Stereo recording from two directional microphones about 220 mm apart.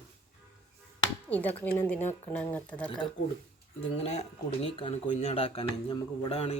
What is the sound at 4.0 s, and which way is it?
Speech, 30° left (ahead or behind).